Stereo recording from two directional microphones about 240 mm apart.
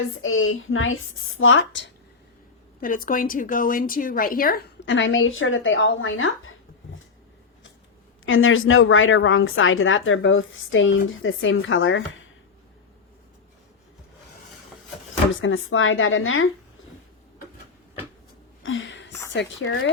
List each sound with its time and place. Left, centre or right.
0.1 s a woman's voice: left
2.8 s a woman's voice: left
8.2 s a woman's voice: left
15.3 s a woman's voice: left
18.6 s a sound: left
19.3 s speech: left